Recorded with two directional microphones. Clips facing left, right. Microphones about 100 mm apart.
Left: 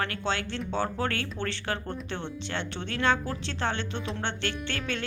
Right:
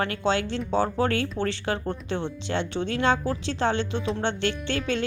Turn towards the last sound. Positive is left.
turn(degrees=-20)  # may be behind; listen again after turning